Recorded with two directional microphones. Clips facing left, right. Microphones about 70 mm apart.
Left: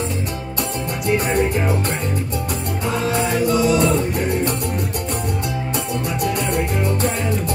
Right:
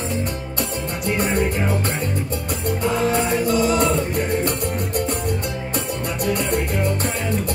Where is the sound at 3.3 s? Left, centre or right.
Right.